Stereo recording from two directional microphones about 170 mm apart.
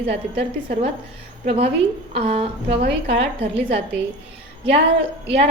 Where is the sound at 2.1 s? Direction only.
35° right (ahead or behind).